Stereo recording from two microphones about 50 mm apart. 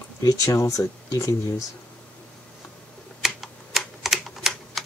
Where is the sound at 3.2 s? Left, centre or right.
Centre.